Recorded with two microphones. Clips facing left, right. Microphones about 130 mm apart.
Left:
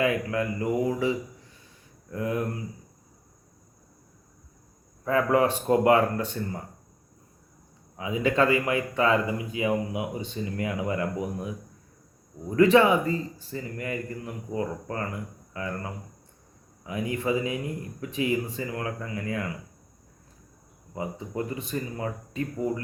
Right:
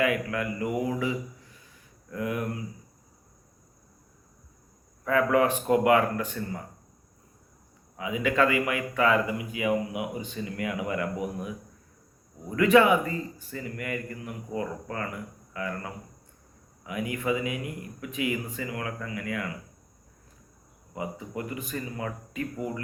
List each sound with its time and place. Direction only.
0.0 s speech: 30° left (ahead or behind)
5.0 s speech: 30° left (ahead or behind)
7.9 s speech: 30° left (ahead or behind)
20.9 s speech: 30° left (ahead or behind)